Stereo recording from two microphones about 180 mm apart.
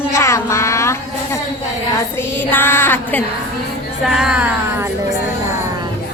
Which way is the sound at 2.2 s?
10° left (ahead or behind).